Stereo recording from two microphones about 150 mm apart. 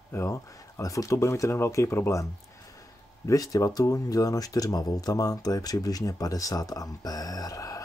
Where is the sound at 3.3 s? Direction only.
20° left (ahead or behind).